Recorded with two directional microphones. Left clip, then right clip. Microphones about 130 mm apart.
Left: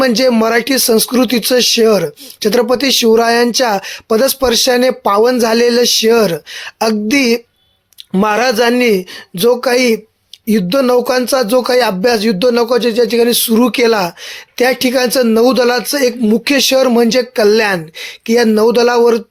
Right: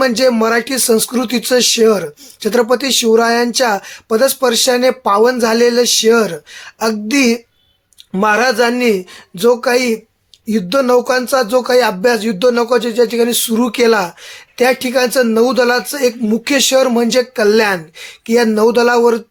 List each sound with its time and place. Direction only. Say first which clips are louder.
0.0 s speech: left 1 dB; 45° left (ahead or behind)